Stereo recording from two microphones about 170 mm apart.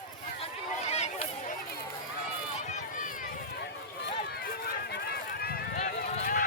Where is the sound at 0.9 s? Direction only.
40° left (ahead or behind).